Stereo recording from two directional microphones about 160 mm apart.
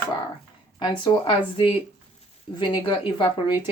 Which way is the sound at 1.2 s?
30° left (ahead or behind).